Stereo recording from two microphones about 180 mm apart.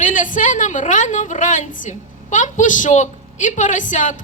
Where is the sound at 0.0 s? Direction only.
45° left (ahead or behind).